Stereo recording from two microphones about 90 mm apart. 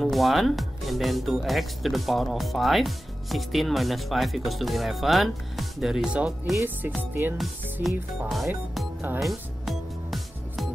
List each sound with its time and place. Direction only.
0.0 s speech: centre (ahead or behind)
7.0 s speech: 20° right (ahead or behind)
7.8 s speech: centre (ahead or behind)
9.2 s music: centre (ahead or behind)